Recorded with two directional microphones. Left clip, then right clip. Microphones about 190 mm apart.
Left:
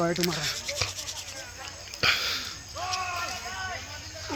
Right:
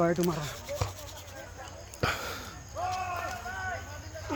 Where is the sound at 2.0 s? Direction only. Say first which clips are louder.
Left 7 dB; 30° right (ahead or behind).